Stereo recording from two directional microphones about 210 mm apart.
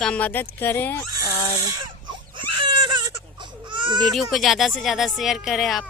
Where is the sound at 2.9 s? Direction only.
20° right (ahead or behind).